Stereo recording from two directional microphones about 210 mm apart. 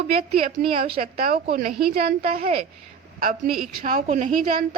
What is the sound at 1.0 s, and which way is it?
A woman's voice, 45° right (ahead or behind).